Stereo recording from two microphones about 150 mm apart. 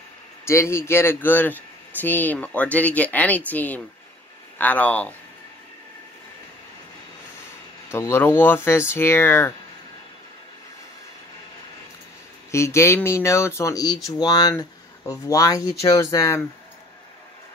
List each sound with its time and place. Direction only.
0.5 s speech: 20° left (ahead or behind)
7.9 s speech: 15° left (ahead or behind)
12.4 s speech: 20° left (ahead or behind)